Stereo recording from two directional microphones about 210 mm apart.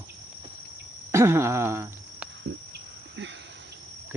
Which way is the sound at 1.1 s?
10° right (ahead or behind).